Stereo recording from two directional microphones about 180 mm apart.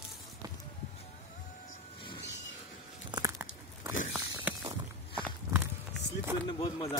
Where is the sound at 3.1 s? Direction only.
20° right (ahead or behind).